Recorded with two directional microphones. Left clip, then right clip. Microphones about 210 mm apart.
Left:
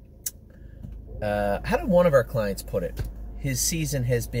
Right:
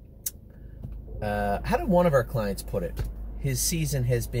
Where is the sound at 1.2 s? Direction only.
15° left (ahead or behind).